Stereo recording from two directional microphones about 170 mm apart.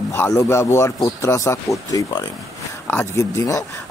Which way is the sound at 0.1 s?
15° left (ahead or behind).